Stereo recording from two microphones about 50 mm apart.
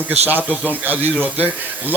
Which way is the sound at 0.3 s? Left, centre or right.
Right.